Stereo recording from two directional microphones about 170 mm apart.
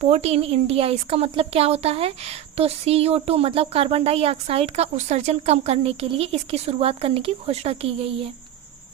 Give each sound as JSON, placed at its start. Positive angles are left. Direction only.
{"t": 0.0, "sound": "a woman's voice", "side_deg": -40}